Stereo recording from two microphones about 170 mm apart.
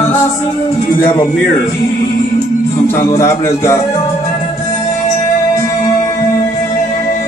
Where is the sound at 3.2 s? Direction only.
15° left (ahead or behind).